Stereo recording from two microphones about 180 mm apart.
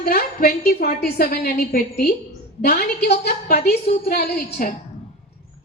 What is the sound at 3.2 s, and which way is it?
A woman's voice, 60° left (ahead or behind).